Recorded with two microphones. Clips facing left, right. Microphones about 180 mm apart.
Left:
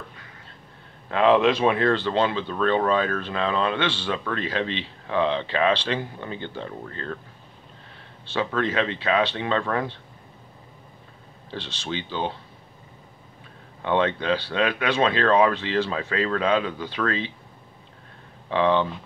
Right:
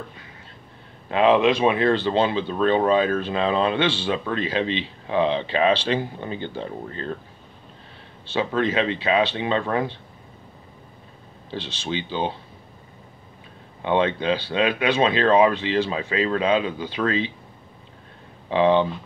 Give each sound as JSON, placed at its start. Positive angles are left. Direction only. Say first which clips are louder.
{"t": 1.0, "sound": "speech", "louder": "right 1 dB", "side_deg": -15}
{"t": 3.8, "sound": "speech", "louder": "right 4 dB", "side_deg": -5}
{"t": 4.1, "sound": "speech", "louder": "right 3 dB", "side_deg": -20}
{"t": 8.3, "sound": "speech", "louder": "right 2 dB", "side_deg": -20}
{"t": 11.6, "sound": "speech", "louder": "right 3 dB", "side_deg": 0}
{"t": 13.8, "sound": "speech", "louder": "right 2 dB", "side_deg": -15}
{"t": 15.6, "sound": "speech", "louder": "right 2 dB", "side_deg": -5}
{"t": 18.5, "sound": "speech", "louder": "right 3 dB", "side_deg": -10}